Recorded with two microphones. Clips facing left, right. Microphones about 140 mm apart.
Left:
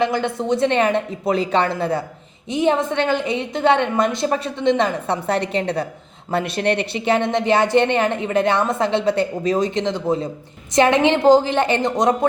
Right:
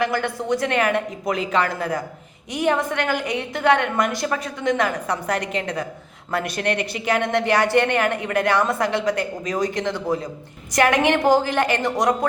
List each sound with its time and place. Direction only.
0.0 s a woman's voice: 20° left (ahead or behind)